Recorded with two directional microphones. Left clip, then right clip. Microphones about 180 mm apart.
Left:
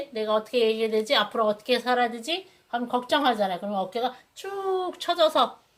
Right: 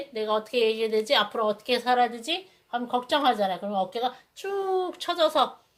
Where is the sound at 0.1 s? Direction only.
30° right (ahead or behind).